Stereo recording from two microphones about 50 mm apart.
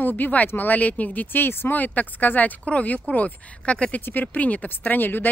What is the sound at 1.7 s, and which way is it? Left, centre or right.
Speech, left.